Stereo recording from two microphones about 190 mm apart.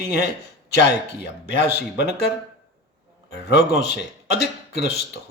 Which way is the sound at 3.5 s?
60° left (ahead or behind).